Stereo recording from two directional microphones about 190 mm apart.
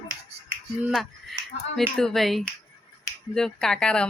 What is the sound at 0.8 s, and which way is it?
Speech, centre (ahead or behind).